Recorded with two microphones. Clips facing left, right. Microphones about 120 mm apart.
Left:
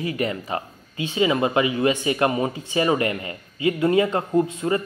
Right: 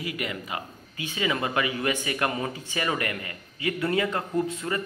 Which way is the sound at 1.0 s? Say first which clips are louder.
Left 7 dB; 25° left (ahead or behind).